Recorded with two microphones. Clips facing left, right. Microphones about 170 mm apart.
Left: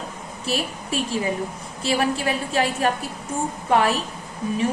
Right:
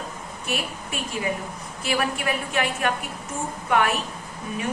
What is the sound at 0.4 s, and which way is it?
A woman's voice, 30° left (ahead or behind).